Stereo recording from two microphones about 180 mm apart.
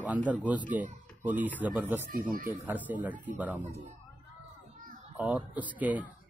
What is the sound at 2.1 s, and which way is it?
Speech, 50° right (ahead or behind).